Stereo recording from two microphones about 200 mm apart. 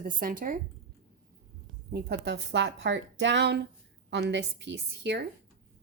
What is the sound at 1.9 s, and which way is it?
A woman's voice, 55° right (ahead or behind).